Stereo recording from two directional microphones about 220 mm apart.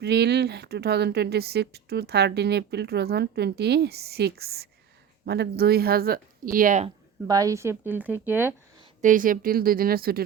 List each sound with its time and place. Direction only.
0.0 s speech: 50° right (ahead or behind)
7.3 s speech: 15° right (ahead or behind)
8.8 s speech: 35° right (ahead or behind)